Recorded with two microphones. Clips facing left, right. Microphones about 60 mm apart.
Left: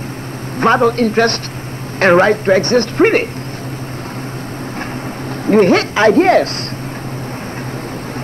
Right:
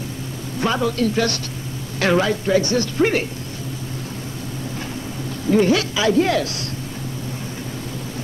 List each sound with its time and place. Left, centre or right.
0.6 s a man's voice: left
5.5 s a man's voice: left